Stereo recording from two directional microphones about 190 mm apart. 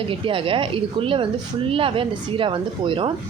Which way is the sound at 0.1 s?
25° right (ahead or behind).